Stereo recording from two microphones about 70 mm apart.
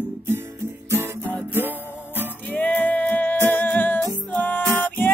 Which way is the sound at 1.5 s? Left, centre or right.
Right.